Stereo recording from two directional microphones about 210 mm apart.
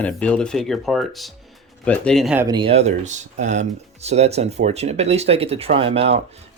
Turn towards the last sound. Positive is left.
turn(degrees=-30)  # may be behind; listen again after turning